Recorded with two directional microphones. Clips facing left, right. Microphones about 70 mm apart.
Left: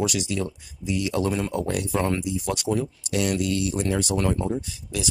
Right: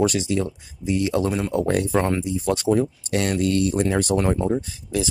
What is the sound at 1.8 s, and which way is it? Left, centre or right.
Speech, right.